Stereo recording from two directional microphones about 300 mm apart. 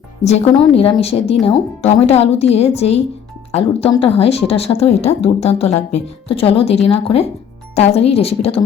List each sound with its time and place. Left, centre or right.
0.3 s speech: left